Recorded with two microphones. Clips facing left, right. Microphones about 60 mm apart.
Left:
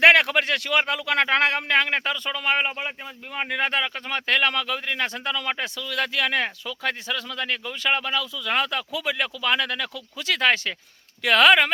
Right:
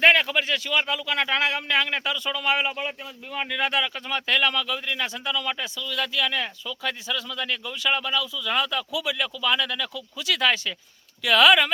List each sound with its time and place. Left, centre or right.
0.0 s speech: left
5.6 s speech: left